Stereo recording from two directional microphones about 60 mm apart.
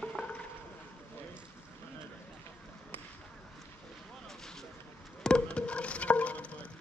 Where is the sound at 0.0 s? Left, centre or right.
Centre.